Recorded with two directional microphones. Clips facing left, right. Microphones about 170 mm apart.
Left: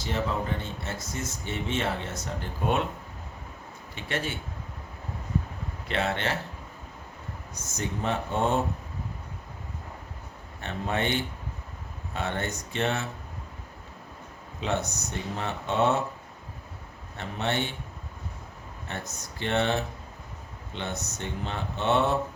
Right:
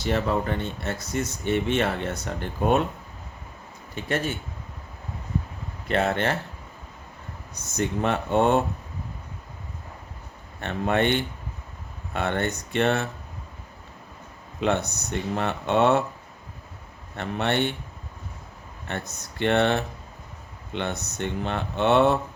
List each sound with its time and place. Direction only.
0.6 s speech: 60° right (ahead or behind)
3.9 s speech: 45° right (ahead or behind)
5.9 s speech: 50° right (ahead or behind)
7.5 s speech: 65° right (ahead or behind)
10.6 s speech: 65° right (ahead or behind)
14.6 s speech: 65° right (ahead or behind)
17.2 s speech: 65° right (ahead or behind)
18.9 s speech: 65° right (ahead or behind)